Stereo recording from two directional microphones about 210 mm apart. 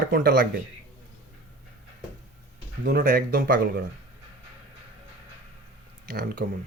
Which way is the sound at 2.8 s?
40° right (ahead or behind).